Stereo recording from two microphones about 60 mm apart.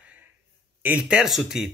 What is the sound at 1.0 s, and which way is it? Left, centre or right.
Speech, centre.